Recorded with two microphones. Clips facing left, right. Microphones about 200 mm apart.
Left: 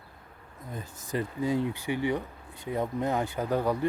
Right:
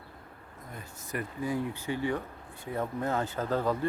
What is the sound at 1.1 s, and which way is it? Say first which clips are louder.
Speech: left 4 dB; 25° left (ahead or behind).